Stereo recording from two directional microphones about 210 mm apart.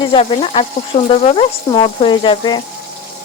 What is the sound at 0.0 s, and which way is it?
Speech, 25° left (ahead or behind).